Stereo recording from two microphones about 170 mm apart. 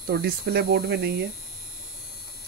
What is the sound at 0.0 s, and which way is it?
Speech, 65° right (ahead or behind).